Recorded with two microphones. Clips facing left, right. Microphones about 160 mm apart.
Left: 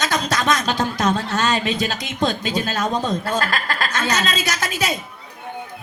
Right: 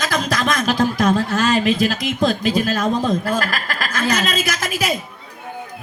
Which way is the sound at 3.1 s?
25° left (ahead or behind).